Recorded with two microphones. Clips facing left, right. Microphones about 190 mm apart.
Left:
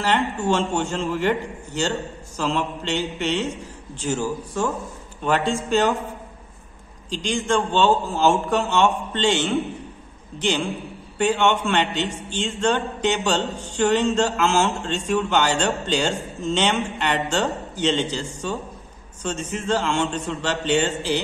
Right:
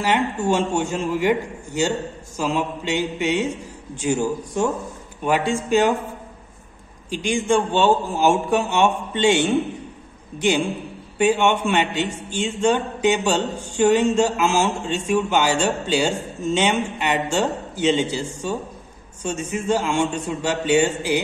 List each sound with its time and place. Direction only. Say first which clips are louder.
0.0 s a man's voice: right 1 dB; 15° right (ahead or behind)
7.1 s a man's voice: right 3 dB; 10° right (ahead or behind)